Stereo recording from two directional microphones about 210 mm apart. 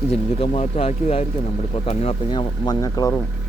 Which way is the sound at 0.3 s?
30° left (ahead or behind).